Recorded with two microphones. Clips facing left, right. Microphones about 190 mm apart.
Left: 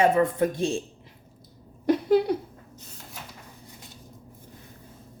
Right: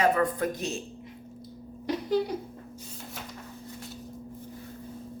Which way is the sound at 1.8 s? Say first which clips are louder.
Left 6 dB; 60° left (ahead or behind).